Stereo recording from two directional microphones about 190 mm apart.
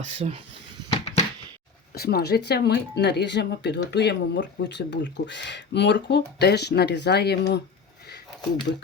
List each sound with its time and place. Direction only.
0.0 s speech: 30° right (ahead or behind)
0.9 s a sound: 35° left (ahead or behind)
2.0 s speech: 55° left (ahead or behind)